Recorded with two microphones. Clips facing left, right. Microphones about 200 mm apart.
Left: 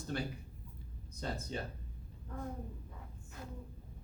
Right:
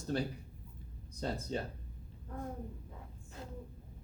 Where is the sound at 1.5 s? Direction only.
35° right (ahead or behind).